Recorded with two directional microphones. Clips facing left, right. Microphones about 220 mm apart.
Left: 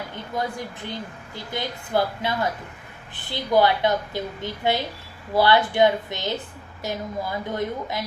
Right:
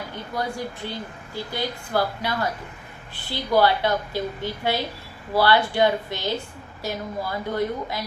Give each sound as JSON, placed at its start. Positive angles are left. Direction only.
{"t": 0.3, "sound": "a woman's voice", "side_deg": 20}